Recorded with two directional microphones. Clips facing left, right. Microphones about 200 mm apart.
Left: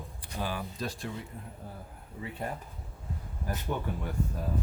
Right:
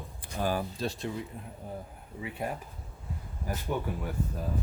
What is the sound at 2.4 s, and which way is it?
Speech, 10° right (ahead or behind).